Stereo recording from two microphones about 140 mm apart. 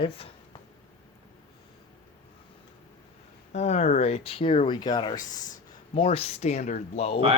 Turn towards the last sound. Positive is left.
turn(degrees=50)  # may be behind; listen again after turning